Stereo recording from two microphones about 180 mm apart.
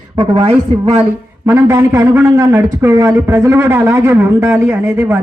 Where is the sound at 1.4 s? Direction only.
15° right (ahead or behind).